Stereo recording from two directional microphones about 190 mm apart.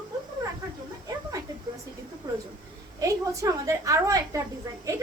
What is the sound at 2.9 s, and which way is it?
A woman's voice, 15° right (ahead or behind).